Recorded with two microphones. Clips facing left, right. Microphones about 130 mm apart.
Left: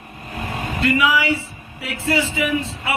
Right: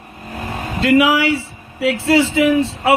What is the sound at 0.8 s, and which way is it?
Speech, 90° right.